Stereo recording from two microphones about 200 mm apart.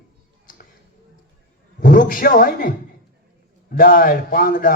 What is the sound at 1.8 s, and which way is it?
Speech, 45° left (ahead or behind).